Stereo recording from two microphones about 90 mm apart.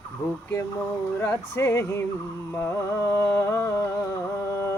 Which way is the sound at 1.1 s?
30° left (ahead or behind).